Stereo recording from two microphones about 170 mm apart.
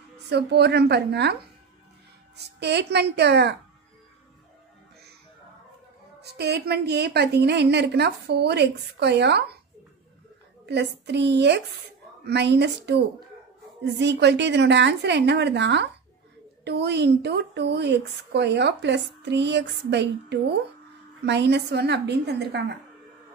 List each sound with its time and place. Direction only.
0.3 s a woman's voice: 75° right (ahead or behind)
6.2 s a woman's voice: 75° right (ahead or behind)
10.7 s a woman's voice: 90° right